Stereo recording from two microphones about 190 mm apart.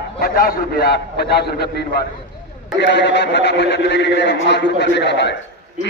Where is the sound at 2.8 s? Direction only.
65° left (ahead or behind).